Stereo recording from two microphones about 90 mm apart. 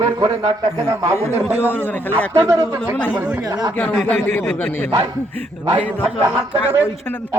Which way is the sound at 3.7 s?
20° left (ahead or behind).